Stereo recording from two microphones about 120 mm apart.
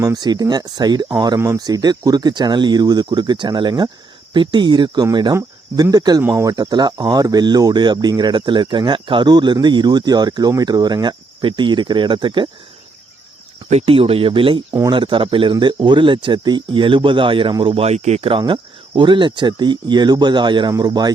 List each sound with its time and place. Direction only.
0.0 s speech: 30° right (ahead or behind)
5.4 s cricket: 30° right (ahead or behind)
6.2 s speech: 25° right (ahead or behind); by 12.5 s 40° right (ahead or behind)
13.7 s speech: 60° right (ahead or behind)
17.8 s speech: 65° right (ahead or behind)
18.3 s speech: 45° right (ahead or behind)